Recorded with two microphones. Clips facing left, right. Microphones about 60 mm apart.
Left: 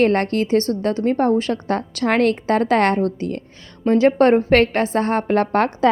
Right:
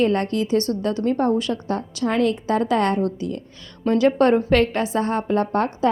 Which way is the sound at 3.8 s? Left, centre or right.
Left.